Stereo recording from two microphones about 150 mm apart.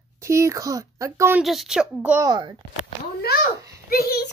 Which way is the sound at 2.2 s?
30° right (ahead or behind).